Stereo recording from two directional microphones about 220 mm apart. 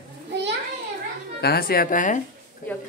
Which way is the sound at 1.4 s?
45° left (ahead or behind).